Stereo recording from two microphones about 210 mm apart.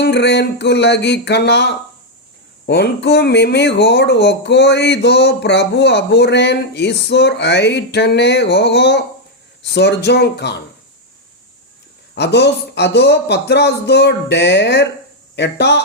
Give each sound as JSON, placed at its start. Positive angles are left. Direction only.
{"t": 0.0, "sound": "speech", "side_deg": 55}
{"t": 12.1, "sound": "speech", "side_deg": 55}